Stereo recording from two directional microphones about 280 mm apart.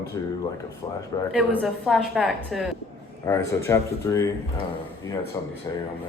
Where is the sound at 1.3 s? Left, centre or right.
Centre.